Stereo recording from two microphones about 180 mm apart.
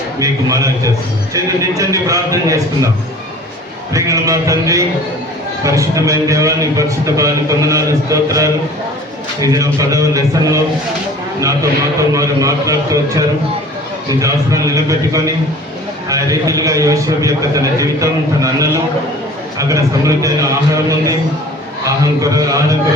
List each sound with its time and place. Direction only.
0.2 s speech: 20° right (ahead or behind)
1.8 s a man's voice: 20° right (ahead or behind)
3.9 s a man's voice: 20° right (ahead or behind)